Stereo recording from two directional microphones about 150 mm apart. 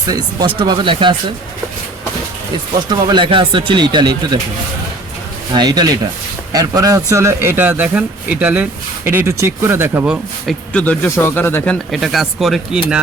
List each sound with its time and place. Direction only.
0.0 s speech: 25° right (ahead or behind)
2.7 s speech: 30° right (ahead or behind)
5.5 s a man's voice: 25° right (ahead or behind)
10.4 s speech: 10° left (ahead or behind)